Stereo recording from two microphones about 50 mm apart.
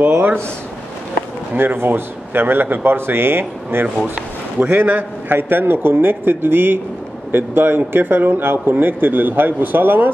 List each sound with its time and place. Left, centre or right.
0.1 s speech: right
1.6 s a man's voice: right